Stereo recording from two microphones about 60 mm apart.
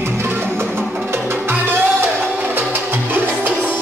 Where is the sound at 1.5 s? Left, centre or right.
Right.